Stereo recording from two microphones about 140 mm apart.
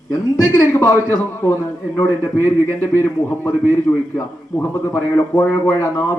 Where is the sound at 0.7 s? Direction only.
20° left (ahead or behind).